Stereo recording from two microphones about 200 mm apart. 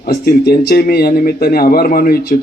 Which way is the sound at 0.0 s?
50° left (ahead or behind).